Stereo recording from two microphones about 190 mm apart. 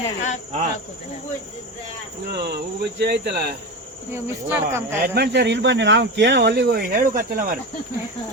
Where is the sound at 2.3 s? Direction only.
60° right (ahead or behind).